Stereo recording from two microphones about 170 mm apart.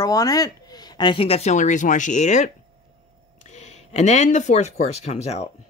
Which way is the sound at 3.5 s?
45° left (ahead or behind).